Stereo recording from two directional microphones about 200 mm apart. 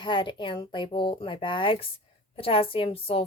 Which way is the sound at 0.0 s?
25° left (ahead or behind).